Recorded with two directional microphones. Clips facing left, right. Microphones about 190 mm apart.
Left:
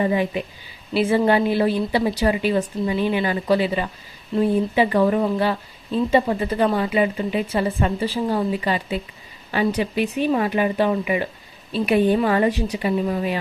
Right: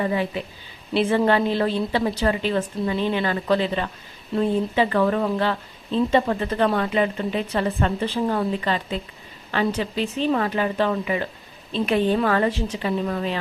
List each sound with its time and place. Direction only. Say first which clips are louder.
0.0 s a woman's voice: left 3 dB; 15° left (ahead or behind)